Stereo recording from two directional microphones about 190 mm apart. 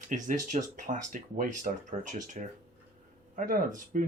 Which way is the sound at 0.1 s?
40° right (ahead or behind).